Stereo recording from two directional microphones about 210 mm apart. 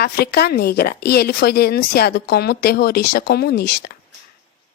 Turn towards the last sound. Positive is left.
turn(degrees=50)  # may be behind; listen again after turning